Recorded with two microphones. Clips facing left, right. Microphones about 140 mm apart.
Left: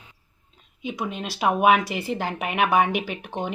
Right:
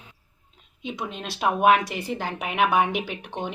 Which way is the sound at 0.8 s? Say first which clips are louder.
Left 3 dB; 5° left (ahead or behind).